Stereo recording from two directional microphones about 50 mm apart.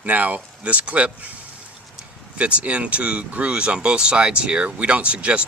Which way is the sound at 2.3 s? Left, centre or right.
Right.